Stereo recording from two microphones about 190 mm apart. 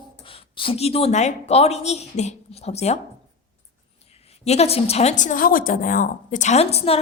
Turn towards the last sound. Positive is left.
turn(degrees=30)  # may be behind; listen again after turning